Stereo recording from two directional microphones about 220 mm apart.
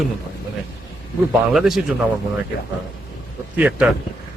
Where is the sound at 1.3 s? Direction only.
Centre (ahead or behind).